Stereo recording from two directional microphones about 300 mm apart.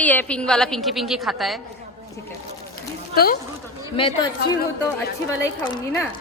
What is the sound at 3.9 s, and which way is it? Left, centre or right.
Speech, centre.